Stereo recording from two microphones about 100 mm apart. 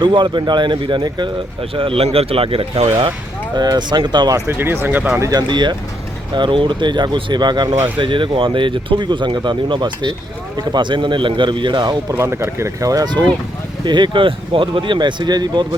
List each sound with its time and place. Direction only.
0.0 s speech: 50° right (ahead or behind)
1.7 s speech: 65° right (ahead or behind)
3.5 s speech: 45° right (ahead or behind)
4.4 s speech: 20° right (ahead or behind)
5.2 s speech: 40° right (ahead or behind)
7.9 s speech: 55° right (ahead or behind)
12.1 s speech: 25° right (ahead or behind); by 15.6 s 45° right (ahead or behind)